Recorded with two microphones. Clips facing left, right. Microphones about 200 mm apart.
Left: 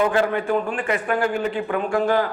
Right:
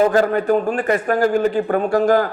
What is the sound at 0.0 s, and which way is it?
A man's voice, 40° right (ahead or behind).